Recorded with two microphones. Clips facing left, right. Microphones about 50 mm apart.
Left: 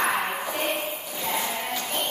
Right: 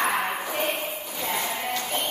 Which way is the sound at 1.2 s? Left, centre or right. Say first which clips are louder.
Even; centre.